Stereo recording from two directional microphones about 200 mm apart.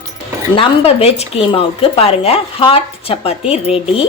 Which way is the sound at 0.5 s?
25° left (ahead or behind).